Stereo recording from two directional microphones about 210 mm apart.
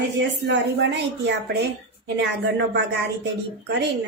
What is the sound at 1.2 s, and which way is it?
Speech, 55° right (ahead or behind).